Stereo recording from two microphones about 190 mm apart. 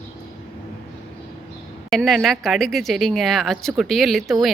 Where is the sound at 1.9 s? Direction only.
Centre (ahead or behind).